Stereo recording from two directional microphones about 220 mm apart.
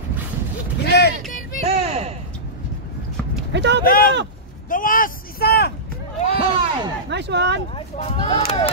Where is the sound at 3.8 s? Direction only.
40° left (ahead or behind).